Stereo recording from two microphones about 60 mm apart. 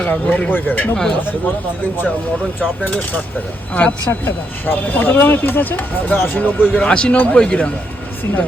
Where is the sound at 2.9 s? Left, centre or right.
Left.